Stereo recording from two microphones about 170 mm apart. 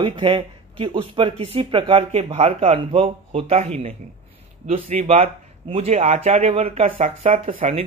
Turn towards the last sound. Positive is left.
turn(degrees=-35)  # may be behind; listen again after turning